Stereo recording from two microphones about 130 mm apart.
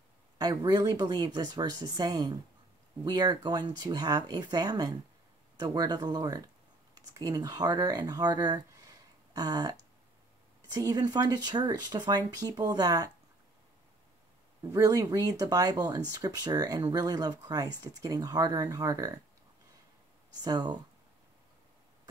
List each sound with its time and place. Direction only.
0.4 s speech: 30° right (ahead or behind)
14.6 s speech: 30° right (ahead or behind)
20.4 s speech: 30° right (ahead or behind)